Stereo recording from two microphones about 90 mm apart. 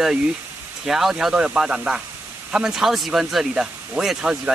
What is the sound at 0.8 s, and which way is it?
Speech, 5° right (ahead or behind).